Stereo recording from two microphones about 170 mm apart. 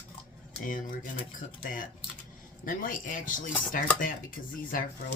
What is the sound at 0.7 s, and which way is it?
Speech, 50° left (ahead or behind).